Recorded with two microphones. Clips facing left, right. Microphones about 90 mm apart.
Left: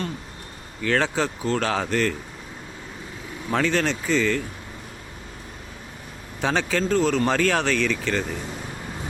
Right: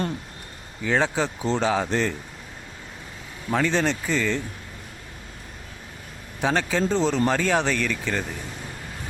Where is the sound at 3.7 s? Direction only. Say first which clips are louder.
Left 1 dB; 15° right (ahead or behind).